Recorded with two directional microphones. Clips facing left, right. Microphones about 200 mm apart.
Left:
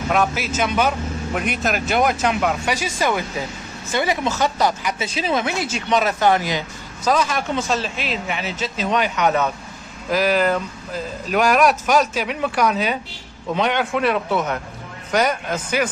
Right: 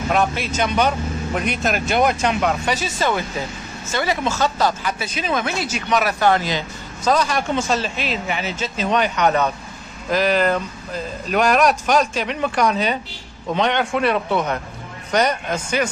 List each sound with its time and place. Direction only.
0.1 s a woman's voice: 5° left (ahead or behind)
7.1 s speech: 5° left (ahead or behind)